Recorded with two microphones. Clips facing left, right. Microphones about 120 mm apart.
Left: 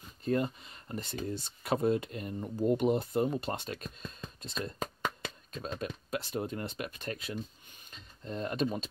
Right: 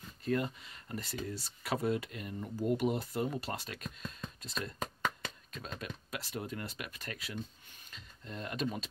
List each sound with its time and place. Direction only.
0.2 s speech: 25° left (ahead or behind)